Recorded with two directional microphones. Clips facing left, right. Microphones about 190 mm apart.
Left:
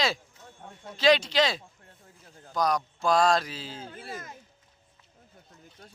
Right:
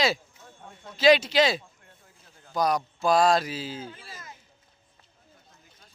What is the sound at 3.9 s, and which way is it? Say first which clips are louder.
Speech: left 6 dB; 55° left (ahead or behind).